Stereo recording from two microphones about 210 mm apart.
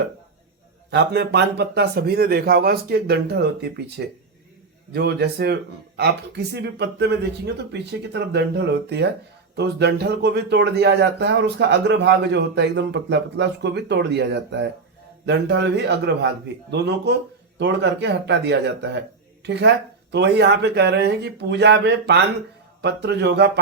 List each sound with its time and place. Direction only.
0.9 s a man's voice: 55° right (ahead or behind)